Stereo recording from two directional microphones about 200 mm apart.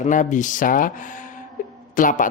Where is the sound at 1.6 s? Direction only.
40° left (ahead or behind).